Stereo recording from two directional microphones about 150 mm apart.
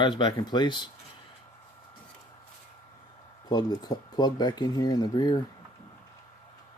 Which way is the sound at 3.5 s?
25° left (ahead or behind).